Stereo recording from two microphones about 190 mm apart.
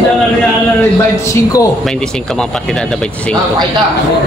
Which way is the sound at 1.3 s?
20° left (ahead or behind).